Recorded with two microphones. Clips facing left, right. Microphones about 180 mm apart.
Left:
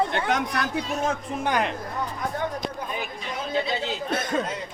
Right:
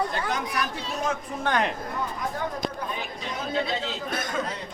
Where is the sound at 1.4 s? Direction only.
10° left (ahead or behind).